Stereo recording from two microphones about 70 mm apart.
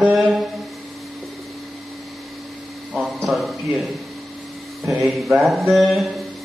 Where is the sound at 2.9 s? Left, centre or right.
Centre.